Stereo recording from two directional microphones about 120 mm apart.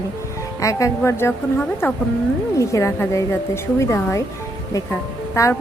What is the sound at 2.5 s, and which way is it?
Speech, 25° left (ahead or behind).